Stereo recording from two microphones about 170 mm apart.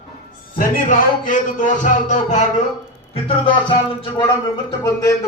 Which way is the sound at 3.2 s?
30° left (ahead or behind).